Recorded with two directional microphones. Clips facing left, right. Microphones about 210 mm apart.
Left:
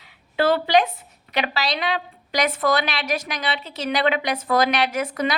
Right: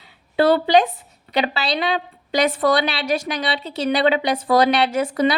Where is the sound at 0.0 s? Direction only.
35° right (ahead or behind).